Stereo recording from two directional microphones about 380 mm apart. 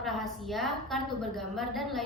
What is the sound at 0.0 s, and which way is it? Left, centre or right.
A woman's voice, centre.